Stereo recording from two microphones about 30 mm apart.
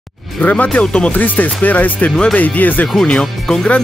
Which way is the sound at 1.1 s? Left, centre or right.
Left.